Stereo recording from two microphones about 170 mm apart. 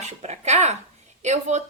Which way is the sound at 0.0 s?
40° right (ahead or behind).